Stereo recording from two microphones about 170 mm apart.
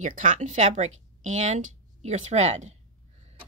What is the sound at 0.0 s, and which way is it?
A woman's voice, 50° right (ahead or behind).